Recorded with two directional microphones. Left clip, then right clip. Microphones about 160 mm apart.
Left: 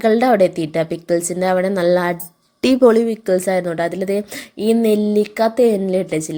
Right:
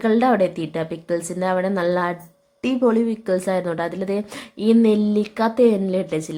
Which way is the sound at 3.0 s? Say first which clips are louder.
Left 4 dB; 10° left (ahead or behind).